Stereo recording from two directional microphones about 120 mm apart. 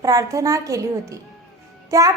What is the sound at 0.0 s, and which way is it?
Speech, 30° right (ahead or behind).